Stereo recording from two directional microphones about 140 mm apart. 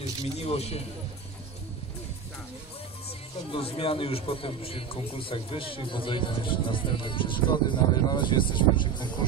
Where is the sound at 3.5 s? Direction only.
40° left (ahead or behind).